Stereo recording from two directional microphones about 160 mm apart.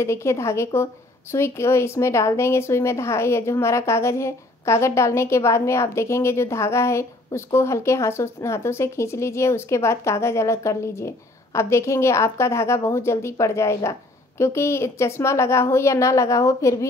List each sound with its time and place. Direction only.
0.0 s speech: 15° left (ahead or behind)